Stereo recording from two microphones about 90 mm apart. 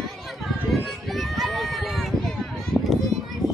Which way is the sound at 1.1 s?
Centre (ahead or behind).